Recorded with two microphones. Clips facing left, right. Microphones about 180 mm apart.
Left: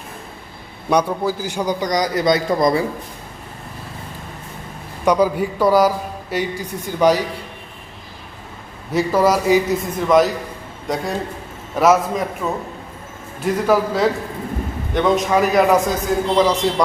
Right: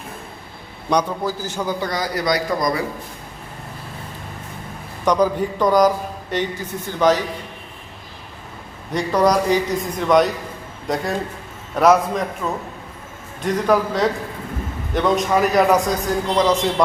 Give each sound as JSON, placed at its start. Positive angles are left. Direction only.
{"t": 0.9, "sound": "a man's voice", "side_deg": 10}
{"t": 5.0, "sound": "a man's voice", "side_deg": 10}
{"t": 8.9, "sound": "a man's voice", "side_deg": 5}